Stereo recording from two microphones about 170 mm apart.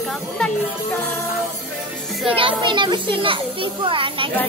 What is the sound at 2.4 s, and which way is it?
A child's voice, 30° right (ahead or behind).